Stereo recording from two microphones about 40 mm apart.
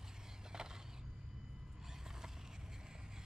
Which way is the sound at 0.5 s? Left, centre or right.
Centre.